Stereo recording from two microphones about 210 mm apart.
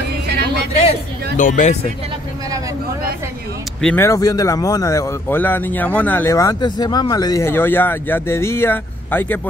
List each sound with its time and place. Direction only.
0.3 s a sound: 55° right (ahead or behind)
1.4 s speech: 35° left (ahead or behind)
3.8 s a man's voice: 10° left (ahead or behind)